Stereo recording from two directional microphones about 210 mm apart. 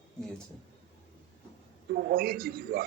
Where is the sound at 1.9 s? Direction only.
45° right (ahead or behind).